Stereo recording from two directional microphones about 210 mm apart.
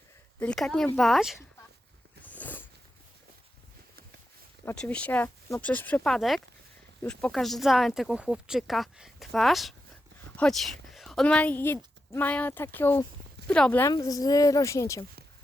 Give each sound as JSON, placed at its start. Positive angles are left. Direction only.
{"t": 0.3, "sound": "speech", "side_deg": 5}
{"t": 2.2, "sound": "a sound", "side_deg": 10}
{"t": 4.6, "sound": "speech", "side_deg": 5}